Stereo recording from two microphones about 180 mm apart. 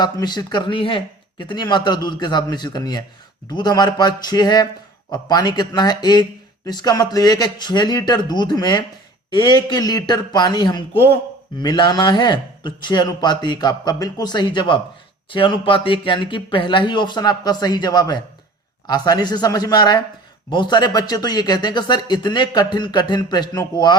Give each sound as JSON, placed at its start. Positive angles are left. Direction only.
{"t": 0.0, "sound": "speech", "side_deg": 25}